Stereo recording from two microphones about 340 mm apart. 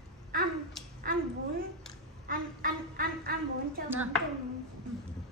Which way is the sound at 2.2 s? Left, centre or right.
Right.